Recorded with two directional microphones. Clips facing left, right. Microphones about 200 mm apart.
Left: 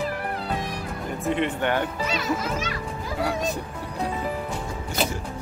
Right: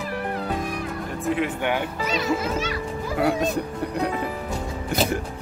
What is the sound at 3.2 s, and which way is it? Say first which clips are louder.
Speech: right 5 dB; 55° right (ahead or behind).